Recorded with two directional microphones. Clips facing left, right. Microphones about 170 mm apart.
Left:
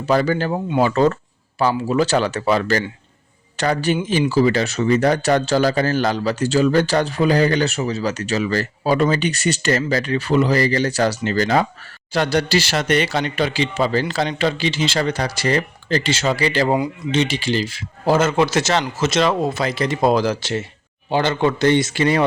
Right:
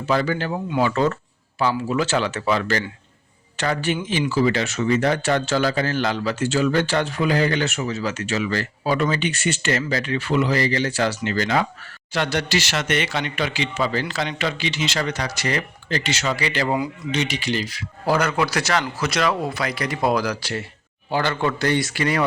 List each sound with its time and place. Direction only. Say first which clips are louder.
0.0 s speech: left 4 dB; 35° left (ahead or behind)